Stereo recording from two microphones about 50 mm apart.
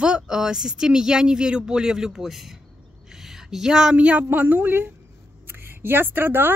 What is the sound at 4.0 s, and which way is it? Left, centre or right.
Speech, right.